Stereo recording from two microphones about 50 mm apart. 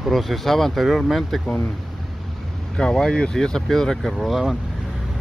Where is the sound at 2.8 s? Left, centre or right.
Centre.